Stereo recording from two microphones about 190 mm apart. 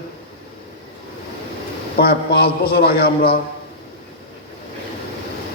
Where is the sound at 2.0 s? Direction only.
55° left (ahead or behind).